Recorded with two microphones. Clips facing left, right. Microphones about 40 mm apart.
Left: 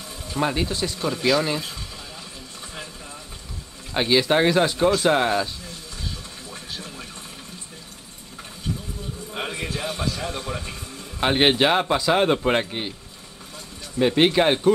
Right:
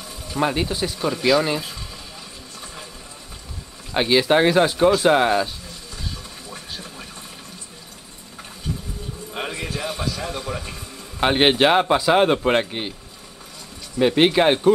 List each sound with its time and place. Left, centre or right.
0.4 s speech: centre
3.9 s speech: centre
9.5 s a sound: right
10.2 s a man's voice: right
11.1 s speech: centre
13.9 s speech: centre